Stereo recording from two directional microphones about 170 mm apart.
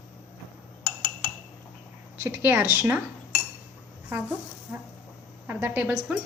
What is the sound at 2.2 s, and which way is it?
Speech, 15° right (ahead or behind).